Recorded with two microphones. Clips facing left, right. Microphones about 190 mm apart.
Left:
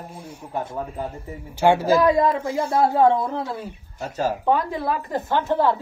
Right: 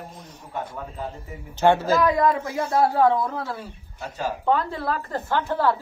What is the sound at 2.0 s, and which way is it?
Speech, 25° left (ahead or behind).